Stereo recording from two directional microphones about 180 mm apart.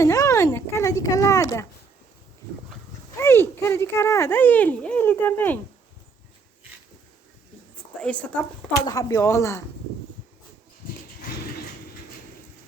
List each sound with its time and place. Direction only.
0.0 s speech: 20° left (ahead or behind)
3.2 s speech: 15° left (ahead or behind)
8.0 s speech: 5° left (ahead or behind)
8.9 s speech: 20° left (ahead or behind)